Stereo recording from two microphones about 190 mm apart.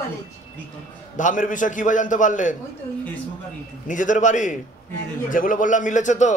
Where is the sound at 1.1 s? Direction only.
40° left (ahead or behind).